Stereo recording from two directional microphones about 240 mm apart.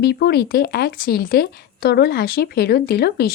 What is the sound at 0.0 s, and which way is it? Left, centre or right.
A woman's voice, left.